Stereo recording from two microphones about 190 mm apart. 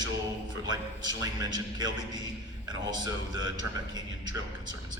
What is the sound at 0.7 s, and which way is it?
A man's voice, 20° right (ahead or behind).